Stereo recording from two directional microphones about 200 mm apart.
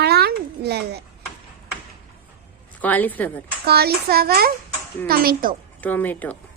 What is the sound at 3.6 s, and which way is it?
A child's voice, 50° right (ahead or behind).